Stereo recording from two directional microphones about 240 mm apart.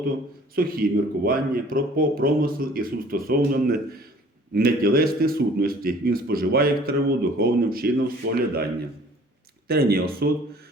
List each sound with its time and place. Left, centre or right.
0.5 s a man's voice: right
9.6 s a man's voice: right